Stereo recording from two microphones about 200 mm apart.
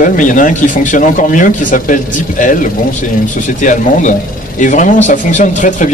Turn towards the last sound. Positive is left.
turn(degrees=40)  # may be behind; listen again after turning